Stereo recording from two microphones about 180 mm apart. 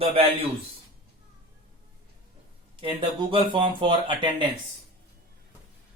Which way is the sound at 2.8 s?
30° right (ahead or behind).